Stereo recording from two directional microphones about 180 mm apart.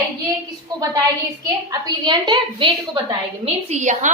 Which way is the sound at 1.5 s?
20° right (ahead or behind).